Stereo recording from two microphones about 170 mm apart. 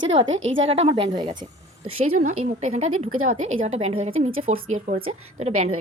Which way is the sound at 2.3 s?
45° right (ahead or behind).